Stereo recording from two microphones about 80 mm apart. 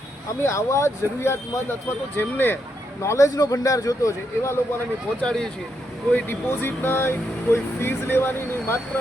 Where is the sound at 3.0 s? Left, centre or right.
Left.